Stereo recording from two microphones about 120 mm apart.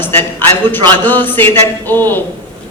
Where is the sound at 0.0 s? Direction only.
15° left (ahead or behind).